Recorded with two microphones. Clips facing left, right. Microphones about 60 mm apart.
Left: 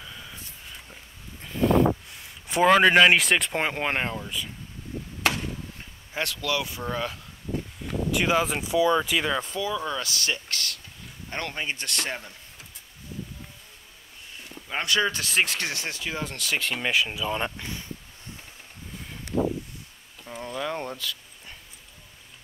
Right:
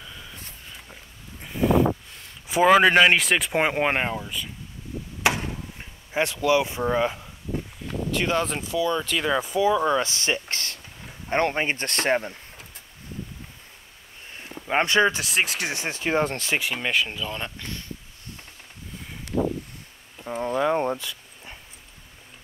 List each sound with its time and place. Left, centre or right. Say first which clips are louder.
0.0 s a sound: even; centre
2.1 s speech: right 2 dB; centre
3.5 s speech: right 4 dB; centre
5.2 s a sound: right 3 dB; centre
8.1 s speech: left 1 dB; centre
8.5 s speech: left 3 dB; centre
9.2 s speech: right 3 dB; centre
9.6 s speech: right 8 dB; right
14.3 s a sound: right 8 dB; right
15.1 s speech: even; centre
15.7 s speech: right 3 dB; right
16.1 s speech: right 12 dB; right
16.5 s speech: even; centre
20.2 s a sound: right 8 dB; right